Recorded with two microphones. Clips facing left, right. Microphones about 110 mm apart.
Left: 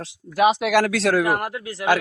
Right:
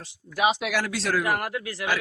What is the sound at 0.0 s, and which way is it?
Speech, 60° left (ahead or behind).